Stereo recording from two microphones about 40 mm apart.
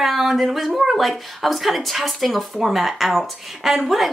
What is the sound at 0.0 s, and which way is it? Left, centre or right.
Speech, centre.